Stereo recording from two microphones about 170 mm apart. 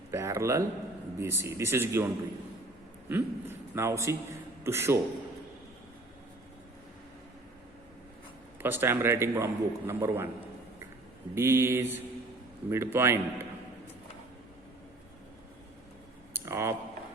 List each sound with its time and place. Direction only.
0.1 s a man's voice: 15° right (ahead or behind)
3.1 s a man's voice: 15° right (ahead or behind)
8.6 s a man's voice: 15° right (ahead or behind)
11.3 s a man's voice: 15° right (ahead or behind)
16.3 s a sound: 15° right (ahead or behind)